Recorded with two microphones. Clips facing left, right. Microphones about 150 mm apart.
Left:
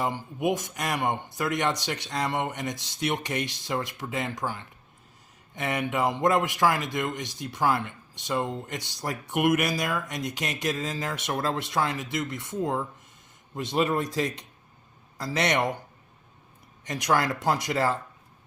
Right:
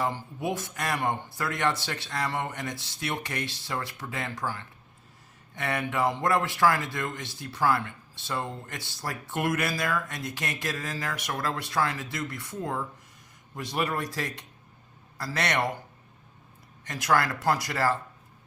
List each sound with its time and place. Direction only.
0.0 s a man's voice: 15° left (ahead or behind)
16.8 s a man's voice: 20° left (ahead or behind)